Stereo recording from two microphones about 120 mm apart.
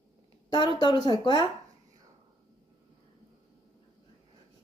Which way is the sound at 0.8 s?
40° left (ahead or behind).